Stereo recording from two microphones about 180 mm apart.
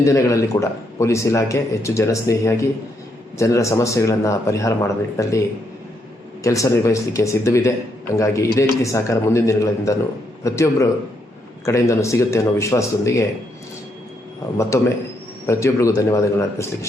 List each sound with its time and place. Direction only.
0.0 s a man's voice: 15° left (ahead or behind)
15.4 s a man's voice: 15° left (ahead or behind)